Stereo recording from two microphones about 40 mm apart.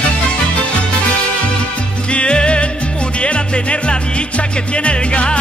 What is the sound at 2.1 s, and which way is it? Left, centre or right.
Music, left.